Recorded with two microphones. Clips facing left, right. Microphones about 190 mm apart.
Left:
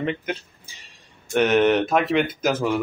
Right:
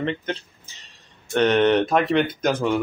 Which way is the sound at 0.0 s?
10° left (ahead or behind).